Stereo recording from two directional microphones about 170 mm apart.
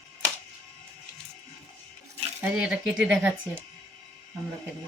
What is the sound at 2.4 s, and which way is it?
Speech, 5° right (ahead or behind).